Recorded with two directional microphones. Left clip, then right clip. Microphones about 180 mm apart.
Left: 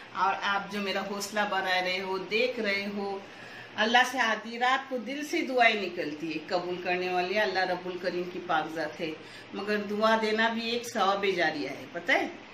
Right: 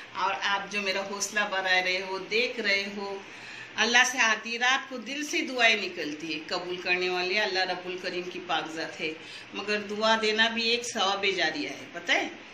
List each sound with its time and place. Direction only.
0.2 s a man's voice: 55° left (ahead or behind)